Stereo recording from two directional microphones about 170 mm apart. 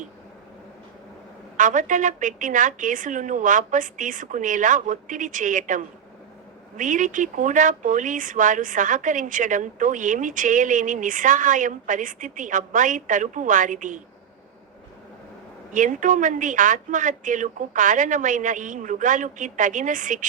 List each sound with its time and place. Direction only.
1.5 s a woman's voice: 50° right (ahead or behind)
15.7 s a woman's voice: 50° right (ahead or behind)